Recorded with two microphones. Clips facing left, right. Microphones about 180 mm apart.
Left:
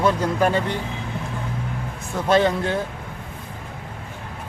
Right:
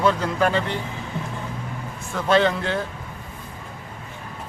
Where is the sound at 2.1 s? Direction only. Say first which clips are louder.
Left 1 dB; 15° left (ahead or behind).